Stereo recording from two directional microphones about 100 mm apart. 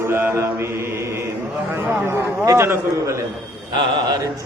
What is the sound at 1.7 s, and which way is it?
A man's voice, 20° right (ahead or behind).